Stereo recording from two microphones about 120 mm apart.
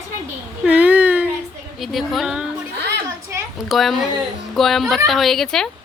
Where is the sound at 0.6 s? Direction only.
15° right (ahead or behind).